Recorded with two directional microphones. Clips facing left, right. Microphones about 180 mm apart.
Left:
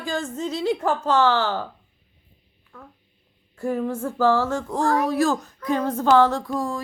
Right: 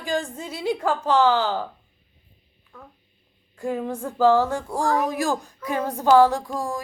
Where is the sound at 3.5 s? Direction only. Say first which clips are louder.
Left 2 dB; 15° right (ahead or behind).